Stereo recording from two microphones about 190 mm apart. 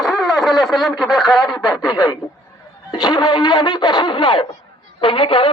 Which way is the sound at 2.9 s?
20° left (ahead or behind).